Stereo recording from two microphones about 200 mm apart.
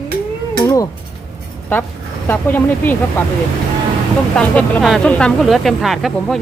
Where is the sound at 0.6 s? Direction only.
15° left (ahead or behind).